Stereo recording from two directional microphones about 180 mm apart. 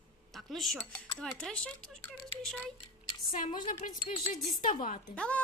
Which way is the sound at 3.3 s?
45° left (ahead or behind).